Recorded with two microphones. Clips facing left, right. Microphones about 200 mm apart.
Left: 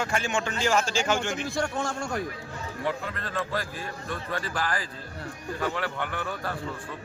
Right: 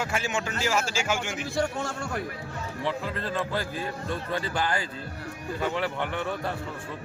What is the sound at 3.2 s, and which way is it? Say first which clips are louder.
A man's voice: right 2 dB; 25° right (ahead or behind).